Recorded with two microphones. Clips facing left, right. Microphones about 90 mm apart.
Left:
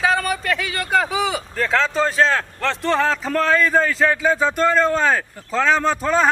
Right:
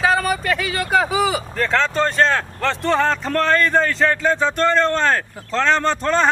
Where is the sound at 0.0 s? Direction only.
Centre (ahead or behind).